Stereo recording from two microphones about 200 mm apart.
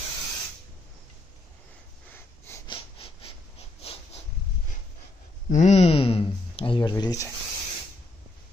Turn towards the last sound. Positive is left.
turn(degrees=20)  # may be behind; listen again after turning